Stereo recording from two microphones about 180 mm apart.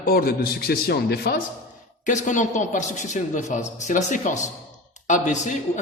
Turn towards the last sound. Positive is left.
turn(degrees=45)  # may be behind; listen again after turning